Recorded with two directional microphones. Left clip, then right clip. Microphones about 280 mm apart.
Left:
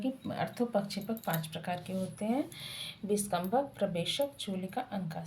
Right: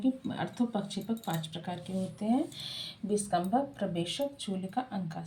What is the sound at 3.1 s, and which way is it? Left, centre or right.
Speech, left.